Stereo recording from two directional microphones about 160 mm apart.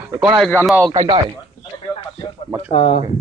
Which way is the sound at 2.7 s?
40° left (ahead or behind).